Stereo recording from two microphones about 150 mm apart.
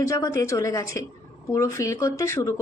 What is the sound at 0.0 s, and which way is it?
A woman's voice, 20° left (ahead or behind).